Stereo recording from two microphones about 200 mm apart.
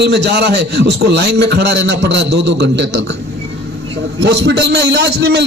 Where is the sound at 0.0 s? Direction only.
60° right (ahead or behind).